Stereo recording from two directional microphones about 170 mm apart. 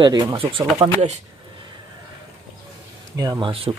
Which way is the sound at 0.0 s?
25° right (ahead or behind).